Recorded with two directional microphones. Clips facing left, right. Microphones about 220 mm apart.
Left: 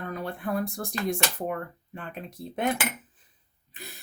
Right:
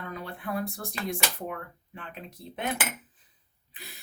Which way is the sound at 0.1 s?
50° left (ahead or behind).